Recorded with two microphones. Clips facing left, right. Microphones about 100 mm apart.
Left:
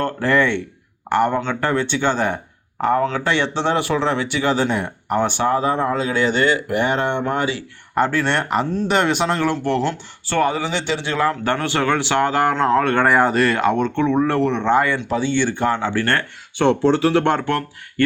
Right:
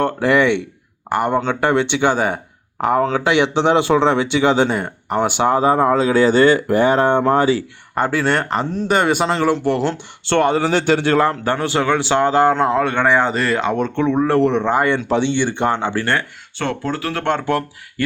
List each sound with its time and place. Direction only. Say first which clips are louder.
0.0 s speech: right 3 dB; 15° right (ahead or behind)
1.6 s speech: right 3 dB; 20° right (ahead or behind)
4.7 s speech: even; centre (ahead or behind)
5.2 s speech: right 4 dB; 20° right (ahead or behind); by 7.6 s 40° right (ahead or behind)
7.9 s speech: right 1 dB; 5° right (ahead or behind)
10.2 s speech: right 3 dB; 75° right (ahead or behind)
10.6 s a man's voice: right 7 dB; 45° right (ahead or behind)
11.4 s speech: right 2 dB; 20° right (ahead or behind)
12.5 s speech: even; 15° right (ahead or behind)
13.0 s speech: left 1 dB; 5° left (ahead or behind)
13.9 s speech: right 2 dB; 15° right (ahead or behind)
16.6 s speech: left 7 dB; 25° left (ahead or behind)
17.4 s speech: right 2 dB; 10° right (ahead or behind)